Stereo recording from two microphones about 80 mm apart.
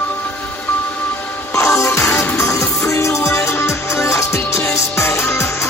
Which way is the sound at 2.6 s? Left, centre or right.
Centre.